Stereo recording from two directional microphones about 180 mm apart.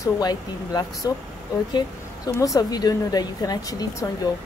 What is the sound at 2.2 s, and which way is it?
A woman's voice, 20° left (ahead or behind).